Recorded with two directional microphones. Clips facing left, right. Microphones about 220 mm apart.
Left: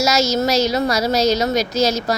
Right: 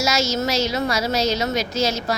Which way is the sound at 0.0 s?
40° left (ahead or behind).